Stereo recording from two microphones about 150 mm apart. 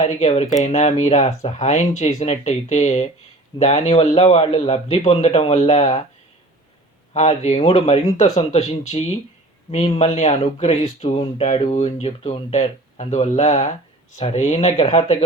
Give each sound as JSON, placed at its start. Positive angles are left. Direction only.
{"t": 0.0, "sound": "speech", "side_deg": 45}
{"t": 7.1, "sound": "speech", "side_deg": 45}